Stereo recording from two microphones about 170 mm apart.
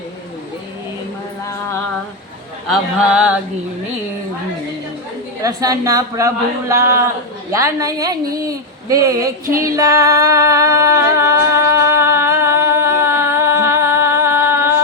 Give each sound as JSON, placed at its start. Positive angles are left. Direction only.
{"t": 2.6, "sound": "speech", "side_deg": -5}
{"t": 5.4, "sound": "a woman's voice", "side_deg": -20}
{"t": 9.6, "sound": "music", "side_deg": -20}